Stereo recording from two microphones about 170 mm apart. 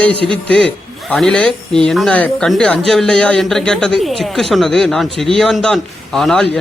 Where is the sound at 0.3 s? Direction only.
5° left (ahead or behind).